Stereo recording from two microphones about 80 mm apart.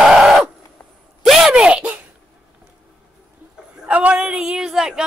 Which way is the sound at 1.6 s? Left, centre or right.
Centre.